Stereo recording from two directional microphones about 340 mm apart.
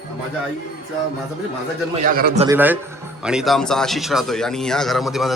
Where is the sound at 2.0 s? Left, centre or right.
Right.